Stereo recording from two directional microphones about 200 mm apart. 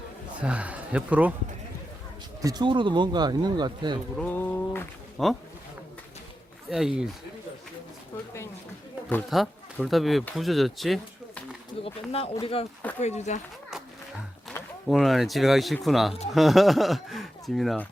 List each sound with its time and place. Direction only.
0.4 s speech: 5° right (ahead or behind)
2.4 s speech: 20° right (ahead or behind)
4.2 s a sound: 10° left (ahead or behind)
5.1 s speech: centre (ahead or behind)
6.7 s speech: 5° right (ahead or behind)
9.0 s speech: 5° left (ahead or behind)
12.1 s speech: 30° left (ahead or behind)
14.5 s speech: centre (ahead or behind)